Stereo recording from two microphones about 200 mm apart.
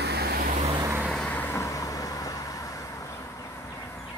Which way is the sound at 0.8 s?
10° right (ahead or behind).